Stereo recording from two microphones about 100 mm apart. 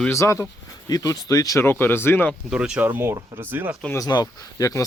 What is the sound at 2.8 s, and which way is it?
Speech, 20° right (ahead or behind).